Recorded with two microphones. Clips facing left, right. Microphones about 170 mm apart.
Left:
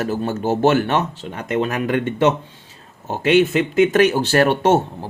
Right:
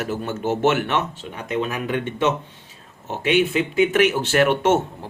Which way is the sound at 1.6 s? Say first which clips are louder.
Left 4 dB; 50° left (ahead or behind).